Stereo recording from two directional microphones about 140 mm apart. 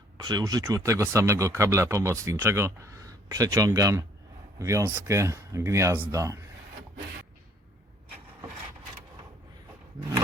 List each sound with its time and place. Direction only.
0.2 s speech: 25° right (ahead or behind)